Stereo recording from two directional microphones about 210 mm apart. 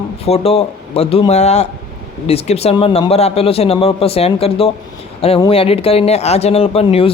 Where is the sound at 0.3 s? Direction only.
30° left (ahead or behind).